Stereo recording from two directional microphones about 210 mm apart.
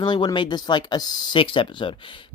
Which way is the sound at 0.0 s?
20° left (ahead or behind).